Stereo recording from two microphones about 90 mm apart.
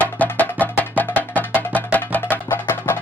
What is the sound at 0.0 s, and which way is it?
Music, 15° left (ahead or behind).